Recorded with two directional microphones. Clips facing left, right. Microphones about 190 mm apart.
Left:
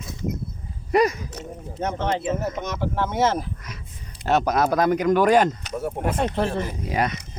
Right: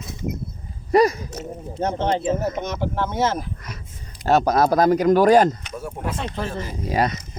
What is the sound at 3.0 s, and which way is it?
Speech, 25° left (ahead or behind).